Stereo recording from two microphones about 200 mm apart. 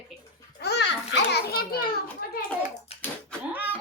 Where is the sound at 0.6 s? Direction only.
55° left (ahead or behind).